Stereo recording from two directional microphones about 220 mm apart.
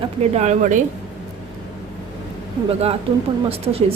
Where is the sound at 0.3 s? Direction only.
35° right (ahead or behind).